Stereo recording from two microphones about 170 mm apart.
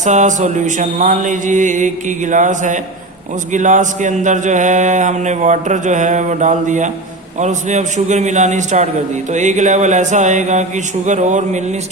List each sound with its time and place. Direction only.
0.0 s speech: 45° right (ahead or behind)